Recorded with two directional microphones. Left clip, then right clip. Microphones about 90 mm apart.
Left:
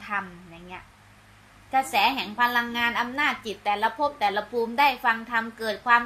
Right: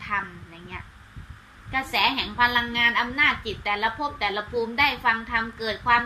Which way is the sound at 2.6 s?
65° left (ahead or behind).